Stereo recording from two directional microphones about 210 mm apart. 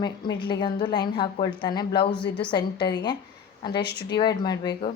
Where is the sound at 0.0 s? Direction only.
20° left (ahead or behind).